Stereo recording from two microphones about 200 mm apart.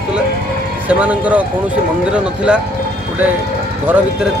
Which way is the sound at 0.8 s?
5° right (ahead or behind).